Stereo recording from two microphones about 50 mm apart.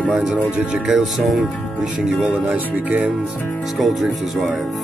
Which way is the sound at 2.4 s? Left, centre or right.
Right.